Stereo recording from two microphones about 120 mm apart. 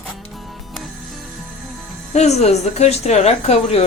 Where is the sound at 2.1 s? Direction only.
65° left (ahead or behind).